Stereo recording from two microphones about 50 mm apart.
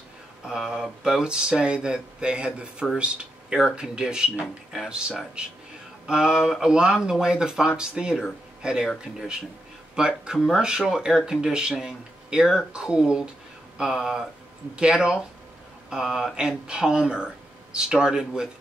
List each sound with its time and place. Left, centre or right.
0.6 s speech: centre
9.9 s speech: centre